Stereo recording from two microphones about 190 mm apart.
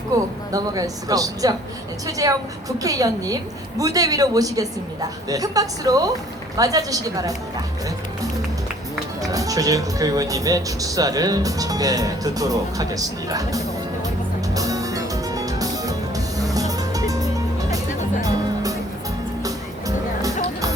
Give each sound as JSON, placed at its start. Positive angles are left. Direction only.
{"t": 0.5, "sound": "a woman's voice", "side_deg": -20}
{"t": 9.2, "sound": "speech", "side_deg": -20}
{"t": 14.5, "sound": "music", "side_deg": -20}